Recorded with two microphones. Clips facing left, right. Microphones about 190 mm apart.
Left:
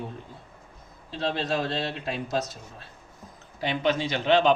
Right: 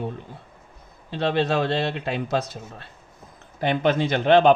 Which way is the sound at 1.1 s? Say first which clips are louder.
Right 6 dB; 60° right (ahead or behind).